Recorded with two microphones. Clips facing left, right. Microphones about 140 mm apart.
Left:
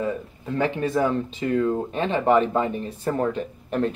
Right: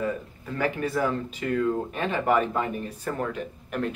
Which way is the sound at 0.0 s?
25° left (ahead or behind).